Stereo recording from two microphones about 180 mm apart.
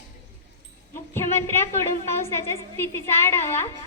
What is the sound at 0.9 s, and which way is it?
A woman's voice, 15° left (ahead or behind).